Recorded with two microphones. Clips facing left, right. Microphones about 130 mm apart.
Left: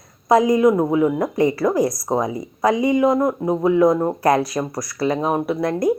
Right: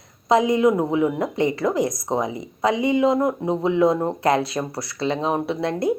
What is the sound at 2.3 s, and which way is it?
Speech, 25° right (ahead or behind).